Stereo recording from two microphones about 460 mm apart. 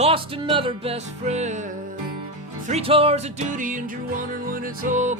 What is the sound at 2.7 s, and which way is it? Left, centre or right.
Music, centre.